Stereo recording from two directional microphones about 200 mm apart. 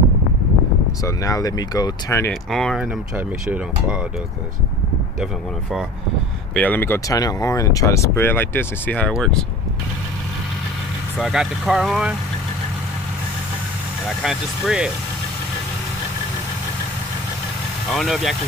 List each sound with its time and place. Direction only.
1.0 s speech: 15° left (ahead or behind)
2.5 s speech: centre (ahead or behind)
5.2 s speech: centre (ahead or behind)
11.1 s speech: centre (ahead or behind)
14.2 s speech: centre (ahead or behind)
17.9 s speech: centre (ahead or behind)